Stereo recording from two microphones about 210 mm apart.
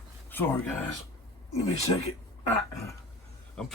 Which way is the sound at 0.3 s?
10° left (ahead or behind).